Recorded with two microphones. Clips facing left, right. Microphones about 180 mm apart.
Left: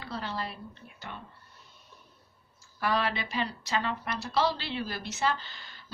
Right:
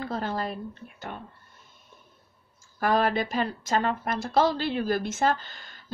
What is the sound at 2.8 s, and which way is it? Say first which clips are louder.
A woman's voice: right 6 dB; 45° right (ahead or behind).